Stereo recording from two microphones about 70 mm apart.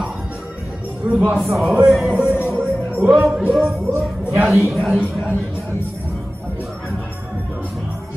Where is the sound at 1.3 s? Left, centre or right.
Centre.